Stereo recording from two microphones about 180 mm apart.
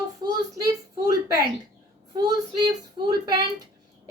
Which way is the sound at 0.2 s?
20° right (ahead or behind).